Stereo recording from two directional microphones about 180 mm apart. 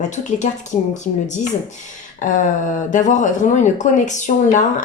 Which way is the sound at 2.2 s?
45° left (ahead or behind).